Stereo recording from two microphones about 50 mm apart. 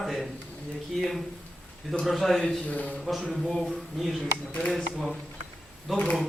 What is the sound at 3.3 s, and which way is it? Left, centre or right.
Speech, centre.